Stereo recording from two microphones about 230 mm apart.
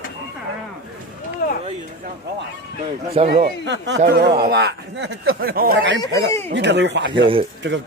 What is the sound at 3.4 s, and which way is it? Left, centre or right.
Speech, right.